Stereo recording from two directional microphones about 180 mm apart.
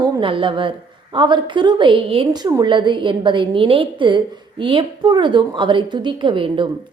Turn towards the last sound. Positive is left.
turn(degrees=-30)  # may be behind; listen again after turning